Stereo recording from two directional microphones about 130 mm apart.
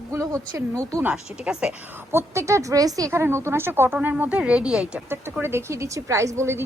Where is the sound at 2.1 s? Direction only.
25° right (ahead or behind); by 5.0 s 5° right (ahead or behind).